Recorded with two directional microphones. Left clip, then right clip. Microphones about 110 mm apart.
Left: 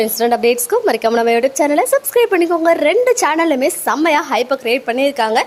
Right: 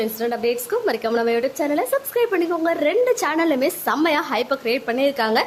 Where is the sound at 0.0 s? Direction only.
55° left (ahead or behind).